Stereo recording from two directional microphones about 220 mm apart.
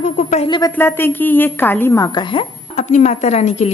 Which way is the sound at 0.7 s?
10° left (ahead or behind).